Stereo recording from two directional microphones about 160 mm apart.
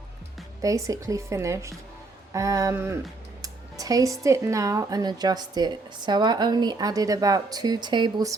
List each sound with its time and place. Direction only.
0.6 s speech: 20° right (ahead or behind)